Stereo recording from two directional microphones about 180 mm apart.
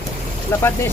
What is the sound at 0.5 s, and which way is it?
Speech, 15° left (ahead or behind).